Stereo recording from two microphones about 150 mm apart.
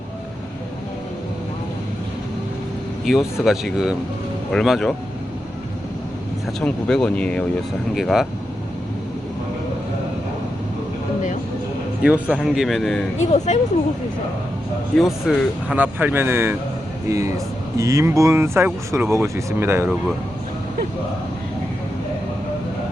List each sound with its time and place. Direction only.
3.1 s a man's voice: centre (ahead or behind)
6.6 s a man's voice: 5° left (ahead or behind)
12.0 s a man's voice: 5° right (ahead or behind)
13.1 s speech: 50° left (ahead or behind)
14.9 s a man's voice: centre (ahead or behind)
15.7 s speech: 10° right (ahead or behind)